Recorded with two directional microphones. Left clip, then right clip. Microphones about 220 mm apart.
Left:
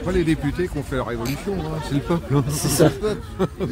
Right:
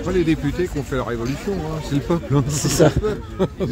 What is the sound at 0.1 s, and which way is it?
Speech, 5° right (ahead or behind).